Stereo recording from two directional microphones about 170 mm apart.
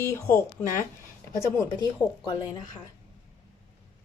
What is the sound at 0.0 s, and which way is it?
Speech, 15° left (ahead or behind).